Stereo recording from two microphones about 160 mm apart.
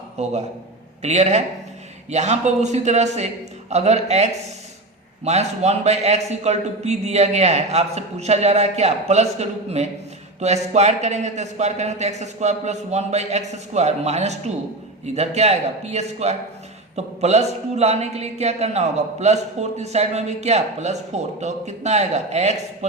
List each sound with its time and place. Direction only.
0.2 s a man's voice: 45° right (ahead or behind)